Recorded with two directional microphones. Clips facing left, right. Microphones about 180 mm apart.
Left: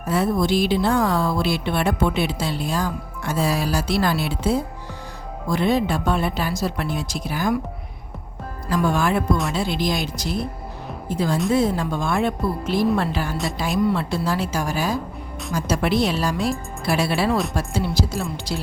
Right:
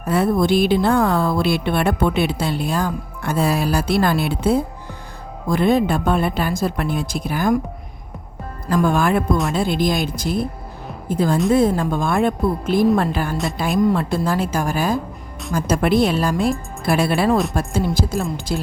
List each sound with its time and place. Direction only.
0.0 s a woman's voice: 55° right (ahead or behind)
8.7 s a woman's voice: 50° right (ahead or behind)